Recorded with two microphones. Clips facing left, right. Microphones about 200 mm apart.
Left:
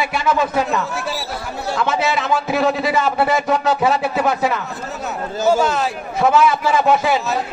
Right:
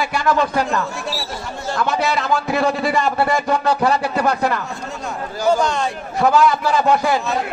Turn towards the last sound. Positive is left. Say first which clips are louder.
# left 1 dB
turn(degrees=0)  # may be behind; listen again after turning